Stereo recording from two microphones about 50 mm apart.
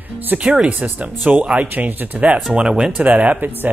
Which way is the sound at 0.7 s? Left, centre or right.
Right.